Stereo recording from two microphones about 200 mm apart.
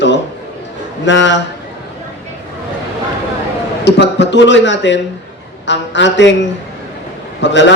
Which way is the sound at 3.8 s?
60° left (ahead or behind).